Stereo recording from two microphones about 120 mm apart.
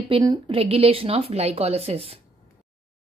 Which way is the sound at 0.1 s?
35° right (ahead or behind).